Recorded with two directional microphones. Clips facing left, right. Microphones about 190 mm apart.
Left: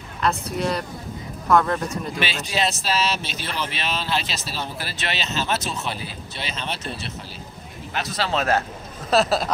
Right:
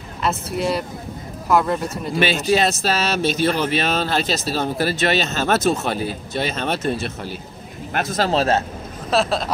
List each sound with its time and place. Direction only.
0.2 s speech: 5° right (ahead or behind)
2.1 s speech: 45° right (ahead or behind); by 8.6 s 30° right (ahead or behind)
9.1 s speech: centre (ahead or behind)